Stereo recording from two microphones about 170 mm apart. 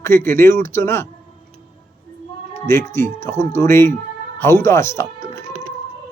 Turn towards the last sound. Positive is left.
turn(degrees=15)  # may be behind; listen again after turning